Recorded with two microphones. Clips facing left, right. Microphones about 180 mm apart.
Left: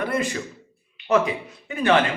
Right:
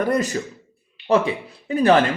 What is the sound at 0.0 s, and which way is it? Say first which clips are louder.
Speech: right 4 dB; 40° right (ahead or behind).